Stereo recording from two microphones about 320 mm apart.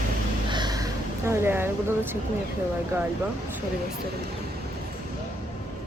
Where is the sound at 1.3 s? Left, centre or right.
Centre.